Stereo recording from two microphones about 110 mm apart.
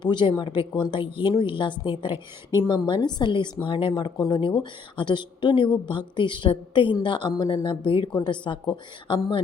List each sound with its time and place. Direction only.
0.0 s a woman's voice: 45° left (ahead or behind)